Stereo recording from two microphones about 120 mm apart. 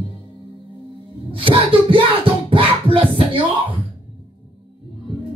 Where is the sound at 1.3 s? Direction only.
45° right (ahead or behind).